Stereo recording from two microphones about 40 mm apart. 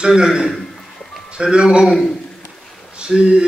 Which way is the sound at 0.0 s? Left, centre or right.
Right.